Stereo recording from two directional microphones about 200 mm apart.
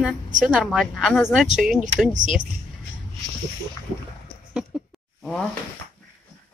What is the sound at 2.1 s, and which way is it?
Speech, 40° right (ahead or behind).